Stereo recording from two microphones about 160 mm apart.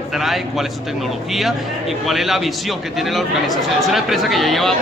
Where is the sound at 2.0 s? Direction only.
Centre (ahead or behind).